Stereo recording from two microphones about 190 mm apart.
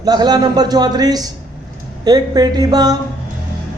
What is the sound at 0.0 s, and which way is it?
A man's voice, 20° right (ahead or behind).